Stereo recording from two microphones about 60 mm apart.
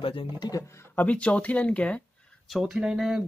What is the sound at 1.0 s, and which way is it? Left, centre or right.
Speech, left.